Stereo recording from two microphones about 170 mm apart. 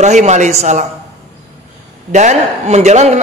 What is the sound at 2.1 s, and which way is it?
A man's voice, 45° right (ahead or behind).